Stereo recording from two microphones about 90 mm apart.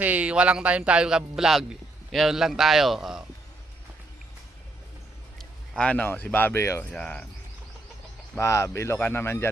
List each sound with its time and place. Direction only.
0.0 s speech: 15° right (ahead or behind)
5.4 s speech: 15° left (ahead or behind); by 6.8 s 30° left (ahead or behind)
8.4 s speech: 35° left (ahead or behind)
9.0 s speech: 20° left (ahead or behind)